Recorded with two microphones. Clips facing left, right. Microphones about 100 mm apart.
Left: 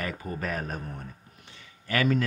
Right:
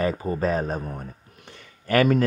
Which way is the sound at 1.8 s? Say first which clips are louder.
Right 6 dB; 50° right (ahead or behind).